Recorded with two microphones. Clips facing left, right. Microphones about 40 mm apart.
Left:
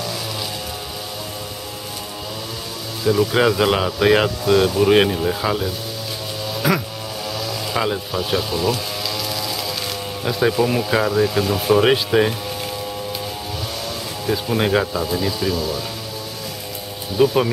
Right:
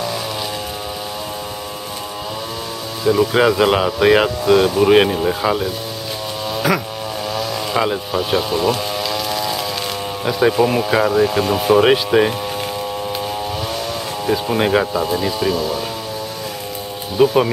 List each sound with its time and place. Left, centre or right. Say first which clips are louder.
3.0 s speech: right 2 dB; centre
6.6 s didgeridoo: right 1 dB; centre
7.2 s a sound: right 3 dB; centre
10.2 s speech: right 3 dB; centre
14.2 s speech: right 3 dB; centre
17.2 s speech: right 3 dB; centre